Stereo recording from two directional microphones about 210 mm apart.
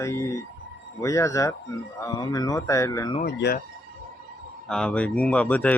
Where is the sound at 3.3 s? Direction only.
50° left (ahead or behind).